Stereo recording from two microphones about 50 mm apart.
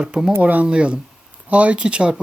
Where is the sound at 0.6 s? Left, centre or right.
Right.